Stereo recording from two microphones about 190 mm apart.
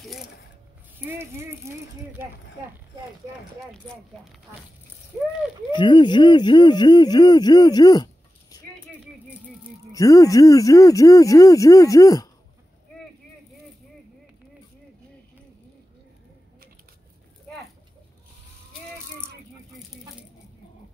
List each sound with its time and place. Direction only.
0.9 s speech: 10° right (ahead or behind)
3.5 s speech: centre (ahead or behind)
5.8 s speech: 25° left (ahead or behind)
9.9 s speech: 20° left (ahead or behind)